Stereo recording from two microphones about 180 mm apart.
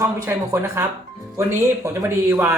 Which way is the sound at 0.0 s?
15° right (ahead or behind).